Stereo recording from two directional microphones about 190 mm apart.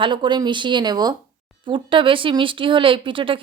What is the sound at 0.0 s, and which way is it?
Speech, 25° right (ahead or behind).